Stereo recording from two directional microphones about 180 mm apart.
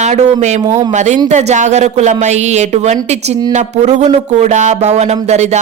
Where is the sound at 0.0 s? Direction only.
40° right (ahead or behind).